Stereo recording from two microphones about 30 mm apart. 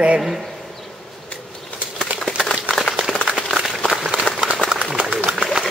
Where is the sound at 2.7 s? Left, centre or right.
Right.